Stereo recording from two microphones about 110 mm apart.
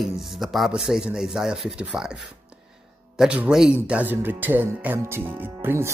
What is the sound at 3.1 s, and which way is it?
Speech, 10° right (ahead or behind).